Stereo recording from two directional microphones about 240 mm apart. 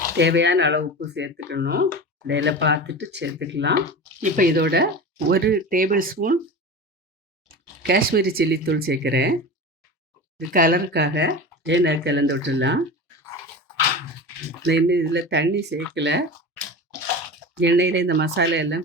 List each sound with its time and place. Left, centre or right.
0.2 s speech: right
7.8 s speech: right
10.5 s speech: right
14.7 s speech: right
17.6 s speech: right